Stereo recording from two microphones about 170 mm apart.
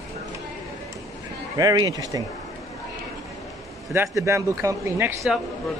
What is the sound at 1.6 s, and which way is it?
Speech, 20° right (ahead or behind).